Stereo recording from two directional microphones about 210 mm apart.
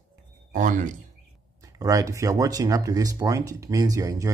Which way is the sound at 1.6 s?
15° right (ahead or behind).